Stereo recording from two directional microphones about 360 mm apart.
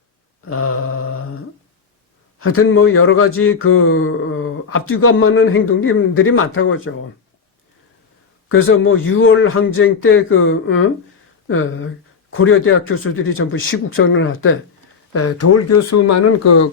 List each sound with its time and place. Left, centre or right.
0.4 s speech: left
2.4 s speech: left
8.4 s speech: left
12.3 s speech: left